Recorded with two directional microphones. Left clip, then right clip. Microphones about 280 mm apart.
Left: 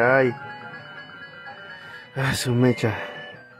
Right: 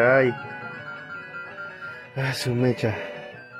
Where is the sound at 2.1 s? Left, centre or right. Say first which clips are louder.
Left 3 dB; centre.